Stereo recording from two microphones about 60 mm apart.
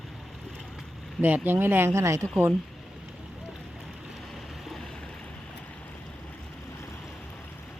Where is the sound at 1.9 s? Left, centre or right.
Right.